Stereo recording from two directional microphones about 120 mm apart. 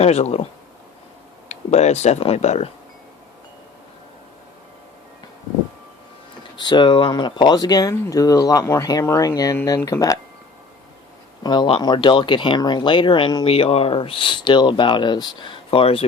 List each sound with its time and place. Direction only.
0.0 s speech: 60° left (ahead or behind)
1.5 s speech: 70° left (ahead or behind)
6.6 s speech: 40° left (ahead or behind)
11.4 s speech: 40° left (ahead or behind)